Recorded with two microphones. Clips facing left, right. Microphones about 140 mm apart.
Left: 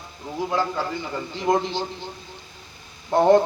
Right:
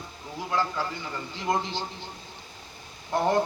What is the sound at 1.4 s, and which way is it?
Speech, 15° left (ahead or behind).